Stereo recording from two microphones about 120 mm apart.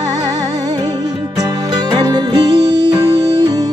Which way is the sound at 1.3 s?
35° right (ahead or behind).